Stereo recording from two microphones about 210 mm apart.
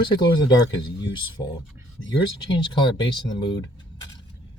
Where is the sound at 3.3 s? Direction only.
20° left (ahead or behind).